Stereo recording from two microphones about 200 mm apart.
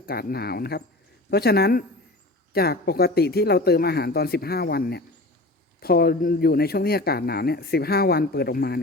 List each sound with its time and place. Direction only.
0.0 s speech: 50° left (ahead or behind)